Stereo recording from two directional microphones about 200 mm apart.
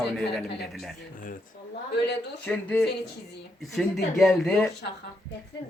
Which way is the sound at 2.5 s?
5° left (ahead or behind).